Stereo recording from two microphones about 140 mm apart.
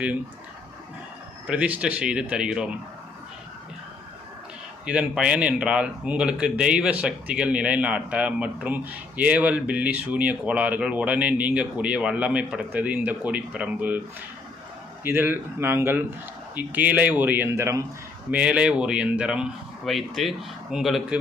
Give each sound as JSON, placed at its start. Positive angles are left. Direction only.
{"t": 1.5, "sound": "speech", "side_deg": -10}
{"t": 4.9, "sound": "speech", "side_deg": -5}
{"t": 15.0, "sound": "speech", "side_deg": -15}
{"t": 18.3, "sound": "speech", "side_deg": -10}